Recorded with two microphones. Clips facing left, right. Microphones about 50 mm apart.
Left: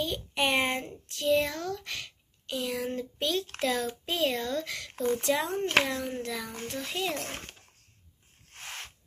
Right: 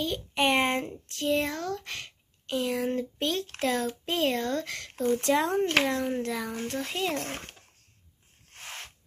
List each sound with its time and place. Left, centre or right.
0.0 s speech: right
0.4 s a sound: right
1.0 s a child's voice: right